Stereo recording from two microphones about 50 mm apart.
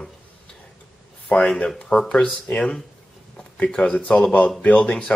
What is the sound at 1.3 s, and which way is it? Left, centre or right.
Speech, left.